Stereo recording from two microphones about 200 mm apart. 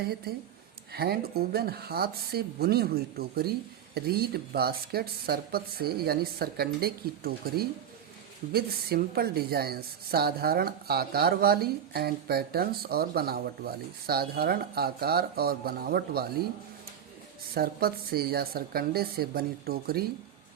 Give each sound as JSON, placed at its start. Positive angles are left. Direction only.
{"t": 0.0, "sound": "speech", "side_deg": -50}
{"t": 17.5, "sound": "speech", "side_deg": -50}